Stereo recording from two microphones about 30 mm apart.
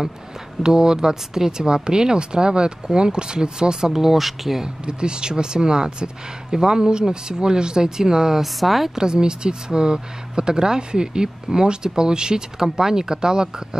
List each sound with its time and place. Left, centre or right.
0.6 s speech: right
3.9 s speech: centre
4.8 s speech: right
8.4 s a woman's voice: centre
8.9 s speech: right